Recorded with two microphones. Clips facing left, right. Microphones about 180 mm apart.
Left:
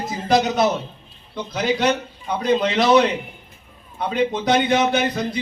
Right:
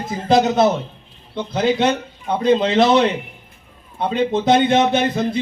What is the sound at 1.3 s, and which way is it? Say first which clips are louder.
A man's voice: right 4 dB; 25° right (ahead or behind).